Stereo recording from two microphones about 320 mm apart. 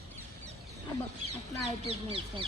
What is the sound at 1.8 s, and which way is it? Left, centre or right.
Speech, centre.